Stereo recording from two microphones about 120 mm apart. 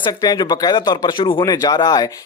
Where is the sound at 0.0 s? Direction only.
35° left (ahead or behind).